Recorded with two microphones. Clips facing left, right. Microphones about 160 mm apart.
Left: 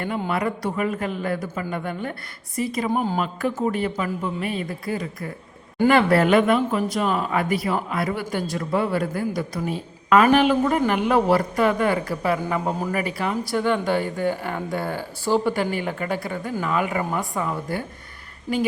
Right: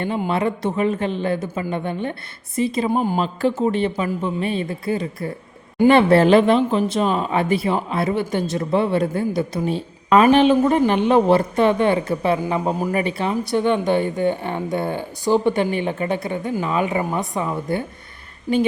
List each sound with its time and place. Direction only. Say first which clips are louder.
0.3 s speech: right 3 dB; 25° right (ahead or behind)